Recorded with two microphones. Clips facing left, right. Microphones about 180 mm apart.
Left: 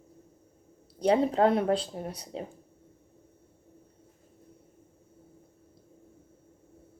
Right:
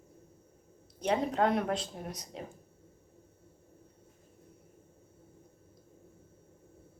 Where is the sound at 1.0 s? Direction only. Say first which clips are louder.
Left 6 dB; 35° left (ahead or behind).